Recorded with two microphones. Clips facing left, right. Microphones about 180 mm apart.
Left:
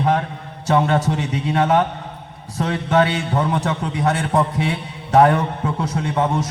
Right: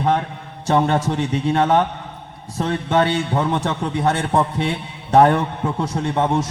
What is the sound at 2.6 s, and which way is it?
A man's voice, 25° right (ahead or behind).